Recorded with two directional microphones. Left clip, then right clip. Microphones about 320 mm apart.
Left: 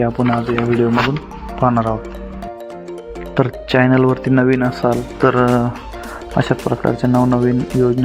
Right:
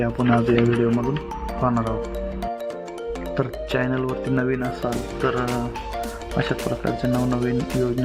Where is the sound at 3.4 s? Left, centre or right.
Centre.